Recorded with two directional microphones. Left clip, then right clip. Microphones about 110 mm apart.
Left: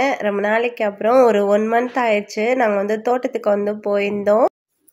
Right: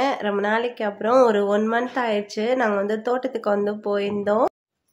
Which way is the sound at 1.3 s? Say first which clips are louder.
Left 5 dB; 35° left (ahead or behind).